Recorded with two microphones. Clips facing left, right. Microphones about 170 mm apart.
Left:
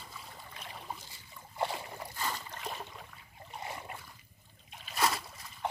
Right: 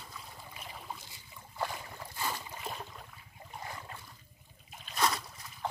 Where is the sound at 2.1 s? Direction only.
10° right (ahead or behind).